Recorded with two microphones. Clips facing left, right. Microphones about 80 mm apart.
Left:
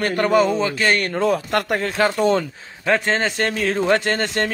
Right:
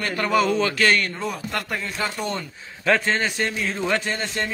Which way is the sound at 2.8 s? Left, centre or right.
Left.